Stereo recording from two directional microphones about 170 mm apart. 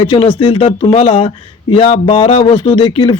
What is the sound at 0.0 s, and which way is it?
A man's voice, 30° left (ahead or behind).